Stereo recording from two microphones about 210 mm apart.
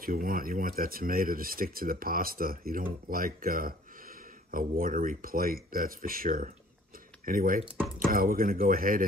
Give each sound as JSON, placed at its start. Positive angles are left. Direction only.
{"t": 0.0, "sound": "speech", "side_deg": -40}